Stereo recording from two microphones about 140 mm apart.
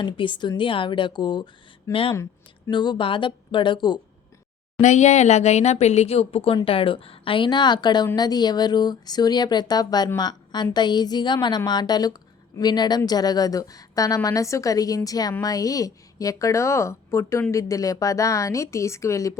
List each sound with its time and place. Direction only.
0.0 s speech: 35° left (ahead or behind)
4.8 s a woman's voice: 55° left (ahead or behind); by 19.3 s 20° left (ahead or behind)